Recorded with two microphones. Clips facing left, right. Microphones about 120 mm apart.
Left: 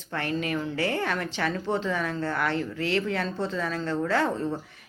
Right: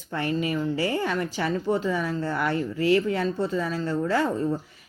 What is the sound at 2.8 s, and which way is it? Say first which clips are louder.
Speech: right 6 dB; 70° left (ahead or behind).